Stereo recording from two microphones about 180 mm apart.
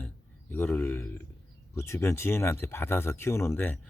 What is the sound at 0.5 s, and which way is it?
Speech, 10° left (ahead or behind).